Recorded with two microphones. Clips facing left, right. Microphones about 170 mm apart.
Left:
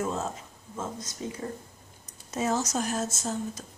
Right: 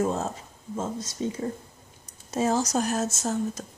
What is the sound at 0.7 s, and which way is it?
Speech, 25° right (ahead or behind).